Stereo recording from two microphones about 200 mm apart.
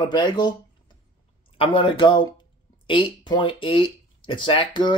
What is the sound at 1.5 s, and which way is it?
Speech, 25° left (ahead or behind).